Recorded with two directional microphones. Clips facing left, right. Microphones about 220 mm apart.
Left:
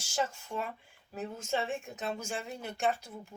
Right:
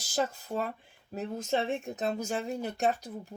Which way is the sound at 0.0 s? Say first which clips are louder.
Right 3 dB; 35° right (ahead or behind).